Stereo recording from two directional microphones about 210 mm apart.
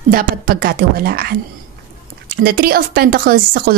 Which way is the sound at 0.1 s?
45° right (ahead or behind).